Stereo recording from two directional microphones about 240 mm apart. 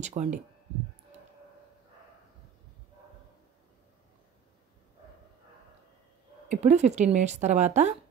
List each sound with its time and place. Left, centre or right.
0.0 s a woman's voice: right
6.5 s a woman's voice: right